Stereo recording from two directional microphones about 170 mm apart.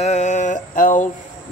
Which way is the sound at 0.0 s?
45° left (ahead or behind).